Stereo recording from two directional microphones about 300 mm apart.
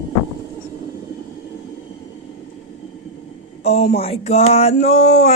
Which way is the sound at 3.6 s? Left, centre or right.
Left.